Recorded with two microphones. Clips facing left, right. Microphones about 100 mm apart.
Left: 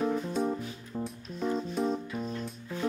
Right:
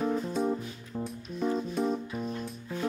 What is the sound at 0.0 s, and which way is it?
Music, centre (ahead or behind).